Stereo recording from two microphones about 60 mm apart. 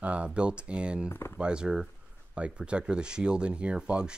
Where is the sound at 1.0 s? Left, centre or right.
Left.